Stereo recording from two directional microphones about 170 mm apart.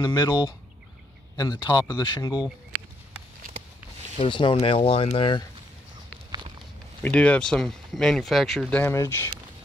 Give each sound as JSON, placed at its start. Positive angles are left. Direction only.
{"t": 0.0, "sound": "speech", "side_deg": 25}
{"t": 4.2, "sound": "speech", "side_deg": 30}
{"t": 7.0, "sound": "speech", "side_deg": 5}